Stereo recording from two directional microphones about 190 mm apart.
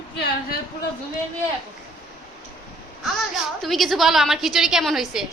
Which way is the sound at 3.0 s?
Centre (ahead or behind).